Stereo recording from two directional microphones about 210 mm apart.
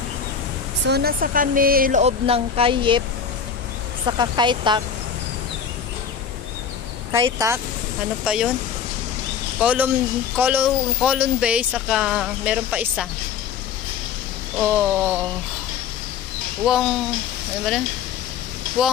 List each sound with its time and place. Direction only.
0.8 s speech: 50° right (ahead or behind); by 3.0 s 25° right (ahead or behind)
4.0 s speech: 20° right (ahead or behind)
7.2 s a sound: 15° right (ahead or behind)
8.2 s speech: 5° right (ahead or behind)
9.6 s speech: 5° right (ahead or behind)
14.6 s a sound: 5° right (ahead or behind)
16.6 s speech: centre (ahead or behind)
18.8 s speech: 5° right (ahead or behind)